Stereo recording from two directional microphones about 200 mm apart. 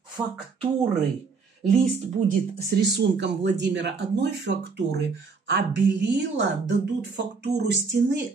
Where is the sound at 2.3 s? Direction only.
50° right (ahead or behind).